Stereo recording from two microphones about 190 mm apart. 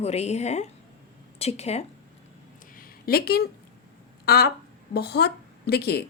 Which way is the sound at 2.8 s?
50° left (ahead or behind).